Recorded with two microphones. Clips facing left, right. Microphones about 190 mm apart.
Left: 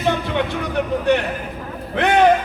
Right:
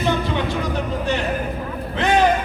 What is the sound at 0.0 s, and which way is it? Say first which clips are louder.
Music: left 1 dB; 60° left (ahead or behind).